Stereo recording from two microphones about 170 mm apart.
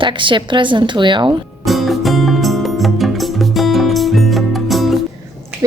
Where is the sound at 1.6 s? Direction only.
Centre (ahead or behind).